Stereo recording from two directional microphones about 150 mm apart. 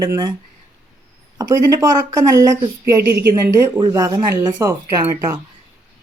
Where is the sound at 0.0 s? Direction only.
25° right (ahead or behind).